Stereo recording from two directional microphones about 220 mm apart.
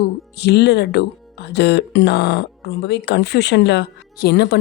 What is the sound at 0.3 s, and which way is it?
A woman's voice, 50° left (ahead or behind).